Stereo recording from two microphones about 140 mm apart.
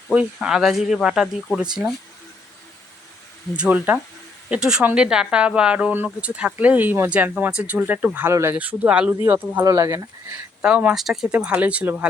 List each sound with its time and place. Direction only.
0.1 s speech: 5° right (ahead or behind)
3.5 s speech: 10° right (ahead or behind)
10.6 s speech: 10° right (ahead or behind)